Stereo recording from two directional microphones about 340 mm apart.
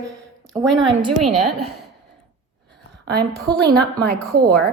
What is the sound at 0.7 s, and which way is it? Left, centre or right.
Speech, right.